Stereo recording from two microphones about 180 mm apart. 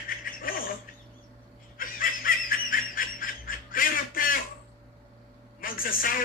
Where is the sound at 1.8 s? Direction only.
55° left (ahead or behind).